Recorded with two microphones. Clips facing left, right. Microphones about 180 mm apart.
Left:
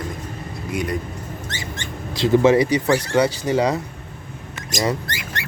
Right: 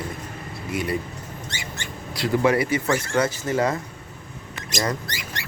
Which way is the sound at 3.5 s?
15° left (ahead or behind).